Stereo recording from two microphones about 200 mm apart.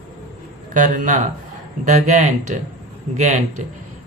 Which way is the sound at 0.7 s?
40° right (ahead or behind).